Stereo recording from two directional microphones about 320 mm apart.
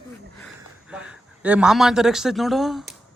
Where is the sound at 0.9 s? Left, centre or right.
Centre.